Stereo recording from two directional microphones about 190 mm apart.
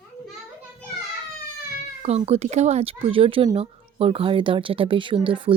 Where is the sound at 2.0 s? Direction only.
35° right (ahead or behind).